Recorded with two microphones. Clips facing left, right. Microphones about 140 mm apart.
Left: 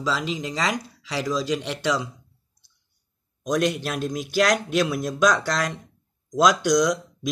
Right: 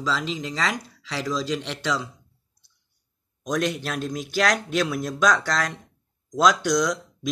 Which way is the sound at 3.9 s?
10° left (ahead or behind).